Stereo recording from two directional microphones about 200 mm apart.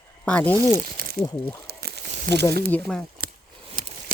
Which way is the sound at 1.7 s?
50° right (ahead or behind).